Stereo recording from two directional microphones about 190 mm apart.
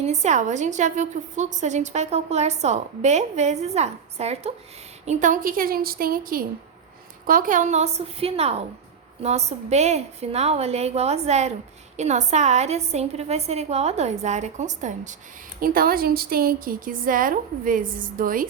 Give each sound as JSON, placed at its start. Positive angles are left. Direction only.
{"t": 0.0, "sound": "a woman's voice", "side_deg": -35}
{"t": 15.6, "sound": "a woman's voice", "side_deg": -50}